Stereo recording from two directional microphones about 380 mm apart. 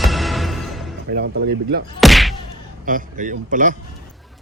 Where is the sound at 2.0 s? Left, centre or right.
Centre.